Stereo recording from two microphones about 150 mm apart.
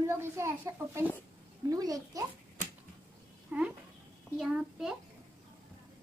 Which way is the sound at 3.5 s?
15° right (ahead or behind).